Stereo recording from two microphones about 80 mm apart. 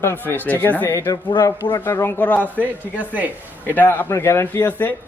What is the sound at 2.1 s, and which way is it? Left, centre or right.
Speech, left.